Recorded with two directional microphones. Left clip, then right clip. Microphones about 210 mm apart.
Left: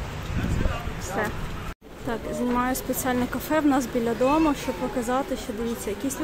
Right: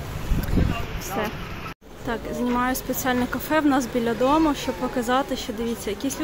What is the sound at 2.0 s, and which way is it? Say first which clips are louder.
Speech: right 1 dB; centre (ahead or behind).